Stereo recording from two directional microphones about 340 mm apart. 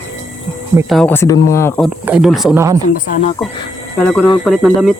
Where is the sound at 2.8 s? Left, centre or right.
Left.